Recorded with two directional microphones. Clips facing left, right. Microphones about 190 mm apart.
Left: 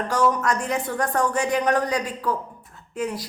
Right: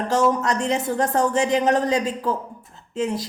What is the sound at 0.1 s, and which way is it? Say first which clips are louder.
Speech: right 2 dB; 25° right (ahead or behind).